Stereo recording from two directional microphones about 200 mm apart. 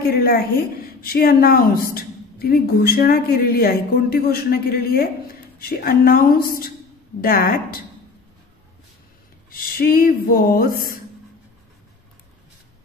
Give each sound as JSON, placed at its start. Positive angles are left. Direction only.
{"t": 0.1, "sound": "speech", "side_deg": 50}
{"t": 9.5, "sound": "speech", "side_deg": 50}